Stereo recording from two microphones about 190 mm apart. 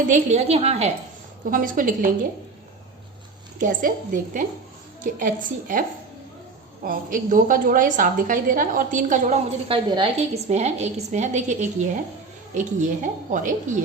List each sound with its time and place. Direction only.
0.1 s a woman's voice: 35° right (ahead or behind)
1.5 s a woman's voice: 45° right (ahead or behind)
3.6 s a woman's voice: 45° right (ahead or behind)
6.8 s a woman's voice: 45° right (ahead or behind)
9.6 s a woman's voice: 25° right (ahead or behind); by 13.7 s 45° right (ahead or behind)